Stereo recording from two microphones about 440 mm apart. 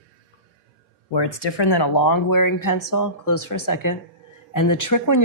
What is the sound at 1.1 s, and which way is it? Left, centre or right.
Speech, left.